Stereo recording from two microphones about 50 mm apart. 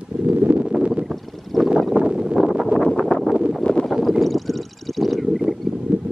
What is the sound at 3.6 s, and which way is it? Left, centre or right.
Boat, centre.